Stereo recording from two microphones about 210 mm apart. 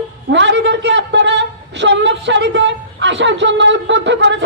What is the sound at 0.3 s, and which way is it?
A woman's voice, 60° right (ahead or behind).